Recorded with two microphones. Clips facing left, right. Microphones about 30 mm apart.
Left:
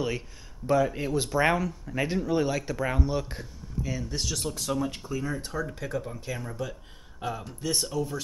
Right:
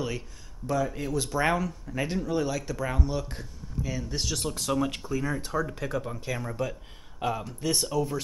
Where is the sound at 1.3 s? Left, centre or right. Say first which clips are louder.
Left 2 dB; centre.